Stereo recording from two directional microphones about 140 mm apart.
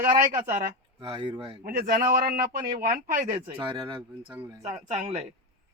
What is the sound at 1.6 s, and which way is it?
A man's voice, 85° right.